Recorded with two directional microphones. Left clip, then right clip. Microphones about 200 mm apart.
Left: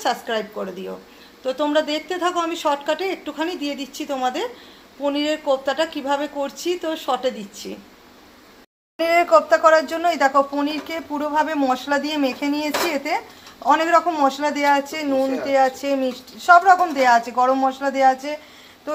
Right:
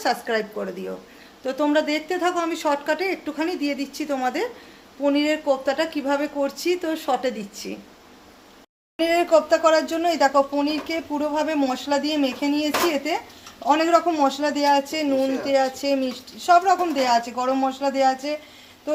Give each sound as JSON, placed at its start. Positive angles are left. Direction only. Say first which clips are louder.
{"t": 0.0, "sound": "speech", "louder": "even", "side_deg": -10}
{"t": 9.0, "sound": "a man's voice", "louder": "left 3 dB", "side_deg": 0}